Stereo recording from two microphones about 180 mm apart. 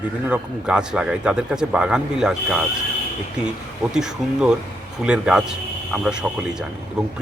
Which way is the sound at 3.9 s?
5° right (ahead or behind).